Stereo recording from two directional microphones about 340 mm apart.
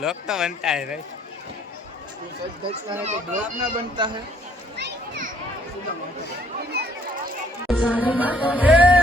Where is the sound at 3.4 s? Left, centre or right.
Centre.